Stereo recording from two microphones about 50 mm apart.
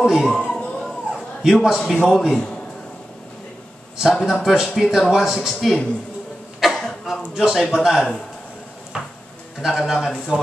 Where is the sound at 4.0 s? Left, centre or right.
Centre.